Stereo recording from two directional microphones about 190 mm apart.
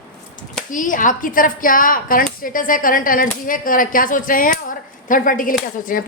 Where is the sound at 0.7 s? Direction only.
45° left (ahead or behind).